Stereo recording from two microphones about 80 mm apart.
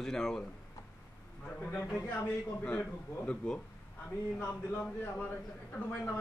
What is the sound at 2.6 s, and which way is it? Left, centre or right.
A man's voice, left.